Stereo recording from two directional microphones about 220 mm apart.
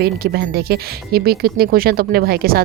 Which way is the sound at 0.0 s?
45° right (ahead or behind).